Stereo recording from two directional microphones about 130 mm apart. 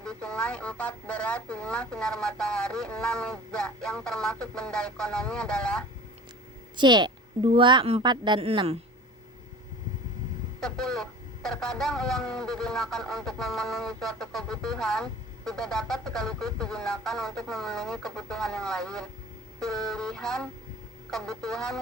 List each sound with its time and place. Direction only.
0.0 s speech: 5° left (ahead or behind)
6.7 s a woman's voice: 35° right (ahead or behind)
8.4 s a woman's voice: 50° right (ahead or behind)
10.6 s speech: 5° left (ahead or behind)